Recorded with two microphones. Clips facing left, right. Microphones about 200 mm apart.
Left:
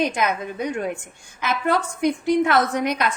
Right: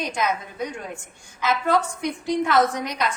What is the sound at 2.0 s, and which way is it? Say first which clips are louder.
A woman's voice: left 5 dB; 60° left (ahead or behind).